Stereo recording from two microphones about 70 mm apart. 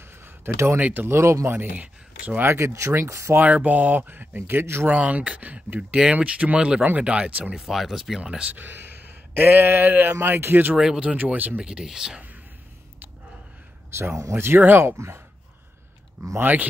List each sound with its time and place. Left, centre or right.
0.0 s a sound: right
0.7 s speech: right
1.0 s speech: right
1.5 s speech: right
2.4 s speech: right
3.3 s speech: right
4.8 s speech: centre
7.5 s speech: centre
8.5 s speech: right
10.8 s speech: centre
11.6 s speech: centre
13.8 s speech: right
16.3 s speech: right